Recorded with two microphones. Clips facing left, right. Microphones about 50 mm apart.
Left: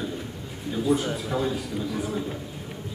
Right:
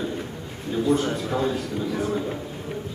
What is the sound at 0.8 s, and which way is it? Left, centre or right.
Speech, centre.